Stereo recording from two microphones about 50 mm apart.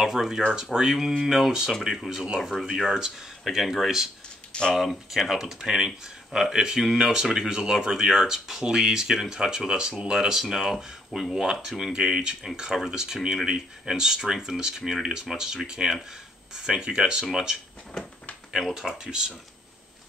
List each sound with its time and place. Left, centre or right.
0.0 s speech: centre
4.5 s a sound: centre
4.7 s speech: centre
11.9 s speech: centre
18.6 s speech: centre